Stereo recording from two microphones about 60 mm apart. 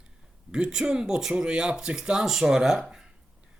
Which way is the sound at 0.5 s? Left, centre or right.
Centre.